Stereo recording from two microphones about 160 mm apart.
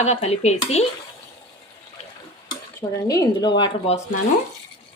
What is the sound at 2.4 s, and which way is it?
Speech, 25° left (ahead or behind).